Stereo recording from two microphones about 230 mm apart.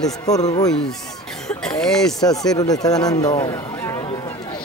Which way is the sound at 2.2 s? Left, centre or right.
Centre.